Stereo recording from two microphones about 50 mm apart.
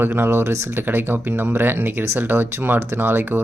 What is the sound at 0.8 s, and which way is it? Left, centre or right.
Speech, right.